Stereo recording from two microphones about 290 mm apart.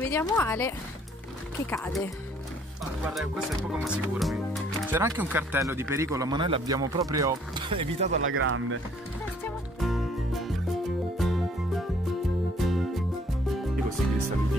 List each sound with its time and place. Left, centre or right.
0.0 s speech: centre
3.7 s speech: centre
8.1 s speech: right
9.8 s music: centre